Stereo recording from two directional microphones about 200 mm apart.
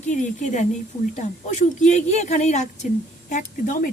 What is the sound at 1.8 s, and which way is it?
Speech, 35° left (ahead or behind).